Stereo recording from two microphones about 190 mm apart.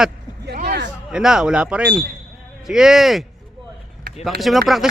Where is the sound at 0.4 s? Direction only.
60° right (ahead or behind).